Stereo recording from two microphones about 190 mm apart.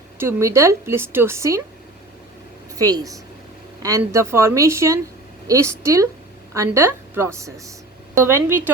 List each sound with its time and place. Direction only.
0.2 s a woman's voice: 15° right (ahead or behind)
2.7 s a woman's voice: 20° right (ahead or behind)